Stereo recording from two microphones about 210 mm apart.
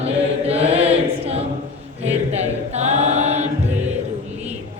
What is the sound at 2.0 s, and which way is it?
Choir, 30° right (ahead or behind).